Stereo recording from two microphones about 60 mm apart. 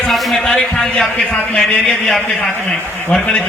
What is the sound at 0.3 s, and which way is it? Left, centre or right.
A man's voice, centre.